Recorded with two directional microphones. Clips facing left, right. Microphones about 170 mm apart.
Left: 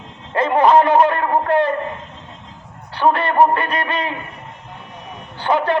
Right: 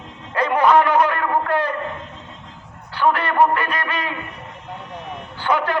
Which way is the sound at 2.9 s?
25° left (ahead or behind).